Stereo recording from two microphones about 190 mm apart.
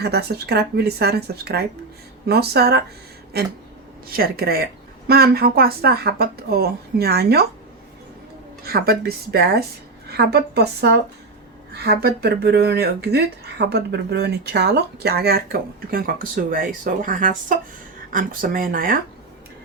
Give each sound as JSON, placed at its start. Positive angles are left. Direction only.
{"t": 0.0, "sound": "speech", "side_deg": -60}
{"t": 8.6, "sound": "speech", "side_deg": -55}